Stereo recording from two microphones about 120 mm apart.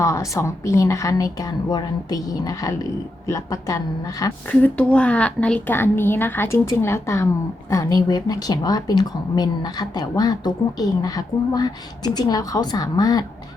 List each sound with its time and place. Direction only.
0.0 s speech: 25° left (ahead or behind)
4.4 s a woman's voice: 10° left (ahead or behind); by 13.2 s 35° left (ahead or behind)